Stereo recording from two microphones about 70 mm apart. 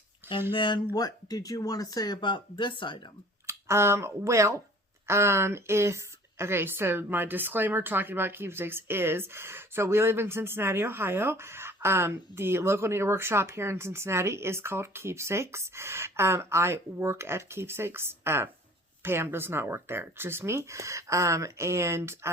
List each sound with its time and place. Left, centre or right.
0.9 s speech: left
3.4 s speech: right